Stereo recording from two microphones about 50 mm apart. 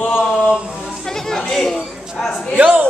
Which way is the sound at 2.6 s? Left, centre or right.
Right.